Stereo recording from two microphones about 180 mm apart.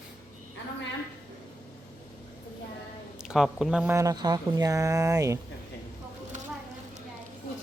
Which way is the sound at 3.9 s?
20° right (ahead or behind).